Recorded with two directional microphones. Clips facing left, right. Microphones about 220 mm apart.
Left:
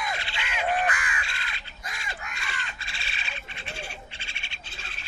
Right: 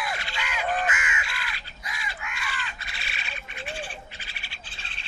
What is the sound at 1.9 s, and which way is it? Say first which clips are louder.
Crow: right 1 dB; 40° left (ahead or behind).